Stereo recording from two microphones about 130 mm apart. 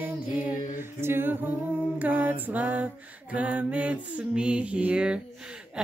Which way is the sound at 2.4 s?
15° right (ahead or behind).